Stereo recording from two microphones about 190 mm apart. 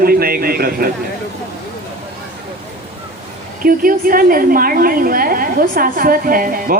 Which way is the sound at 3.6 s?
50° right (ahead or behind).